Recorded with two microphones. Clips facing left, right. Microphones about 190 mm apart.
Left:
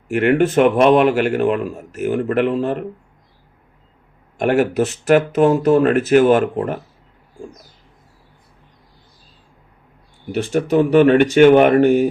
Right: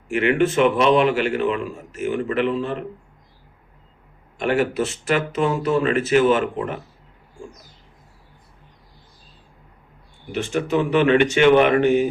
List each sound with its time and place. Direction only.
0.1 s a man's voice: 40° left (ahead or behind)
4.4 s a man's voice: 45° left (ahead or behind)
10.7 s a man's voice: 40° left (ahead or behind)